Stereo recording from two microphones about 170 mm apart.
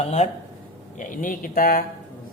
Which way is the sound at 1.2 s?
55° left (ahead or behind).